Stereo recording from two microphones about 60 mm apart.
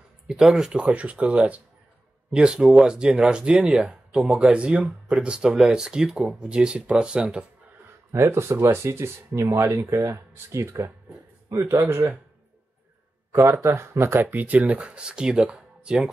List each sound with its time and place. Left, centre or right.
0.3 s speech: centre
2.3 s speech: centre
3.9 s speech: centre
4.4 s speech: centre
8.2 s speech: right
13.3 s speech: right; by 16.1 s centre